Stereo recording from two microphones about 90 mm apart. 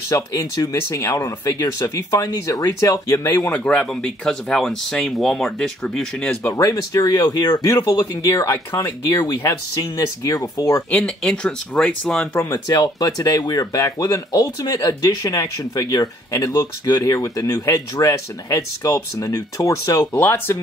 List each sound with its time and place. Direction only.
0.1 s speech: 40° left (ahead or behind); by 6.3 s 5° left (ahead or behind)
6.4 s speech: 35° left (ahead or behind); by 7.8 s 50° left (ahead or behind)
7.8 s speech: 40° left (ahead or behind)
11.2 s speech: 10° left (ahead or behind)
12.6 s speech: 45° left (ahead or behind)
20.2 s speech: 25° left (ahead or behind)